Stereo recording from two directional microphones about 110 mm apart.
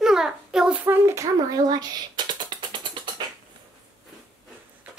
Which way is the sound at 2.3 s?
45° right (ahead or behind).